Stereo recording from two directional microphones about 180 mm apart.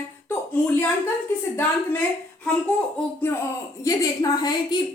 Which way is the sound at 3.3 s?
10° left (ahead or behind).